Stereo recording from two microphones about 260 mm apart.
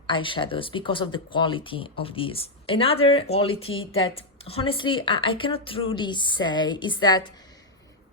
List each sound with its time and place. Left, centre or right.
0.1 s a woman's voice: centre